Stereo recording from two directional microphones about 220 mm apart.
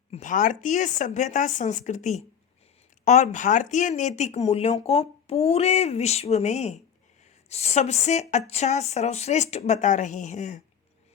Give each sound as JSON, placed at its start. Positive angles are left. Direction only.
{"t": 0.1, "sound": "speech", "side_deg": 35}